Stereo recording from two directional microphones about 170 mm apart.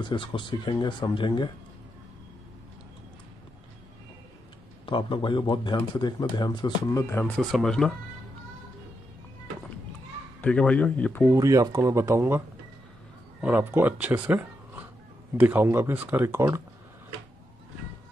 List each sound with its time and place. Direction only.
0.0 s speech: 30° left (ahead or behind)
4.8 s speech: 30° left (ahead or behind); by 7.9 s 5° left (ahead or behind)
10.4 s speech: 5° left (ahead or behind)
11.3 s speech: 20° right (ahead or behind)